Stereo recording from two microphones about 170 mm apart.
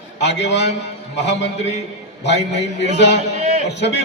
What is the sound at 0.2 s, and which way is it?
A man's voice, 90° left.